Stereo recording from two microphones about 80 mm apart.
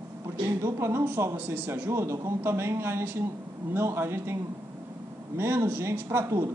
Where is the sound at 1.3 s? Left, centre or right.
Right.